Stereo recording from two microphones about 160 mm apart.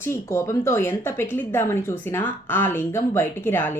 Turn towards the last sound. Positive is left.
turn(degrees=15)  # may be behind; listen again after turning